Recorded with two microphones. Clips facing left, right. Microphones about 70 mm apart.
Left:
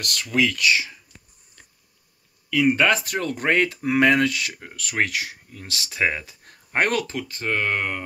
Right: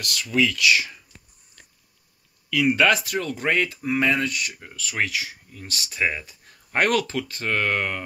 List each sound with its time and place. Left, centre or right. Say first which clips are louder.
0.0 s speech: even; left
2.5 s speech: even; left
4.6 s speech: left 3 dB; left
6.7 s speech: right 1 dB; left